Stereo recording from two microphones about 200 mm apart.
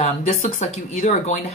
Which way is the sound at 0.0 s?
35° left (ahead or behind).